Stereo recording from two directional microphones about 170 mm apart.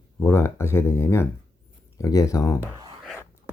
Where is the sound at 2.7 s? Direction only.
20° right (ahead or behind).